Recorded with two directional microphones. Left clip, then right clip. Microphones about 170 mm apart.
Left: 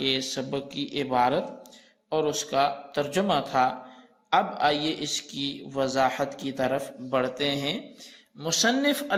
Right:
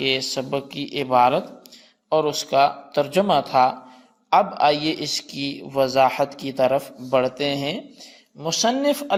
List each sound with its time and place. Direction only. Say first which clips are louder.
0.0 s a man's voice: right 5 dB; 35° right (ahead or behind)
7.2 s speech: right 4 dB; 20° right (ahead or behind)